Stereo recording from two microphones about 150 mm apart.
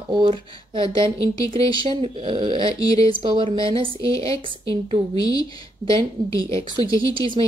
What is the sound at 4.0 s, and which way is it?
Speech, 20° left (ahead or behind).